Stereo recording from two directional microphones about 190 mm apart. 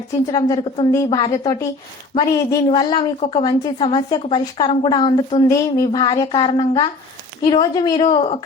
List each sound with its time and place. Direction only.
0.3 s a woman's voice: 20° left (ahead or behind)